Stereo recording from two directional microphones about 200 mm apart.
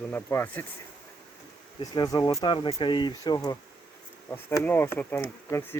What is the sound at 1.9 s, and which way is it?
Speech, 20° left (ahead or behind).